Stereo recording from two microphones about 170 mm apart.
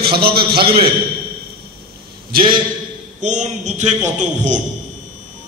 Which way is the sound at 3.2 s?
45° right (ahead or behind).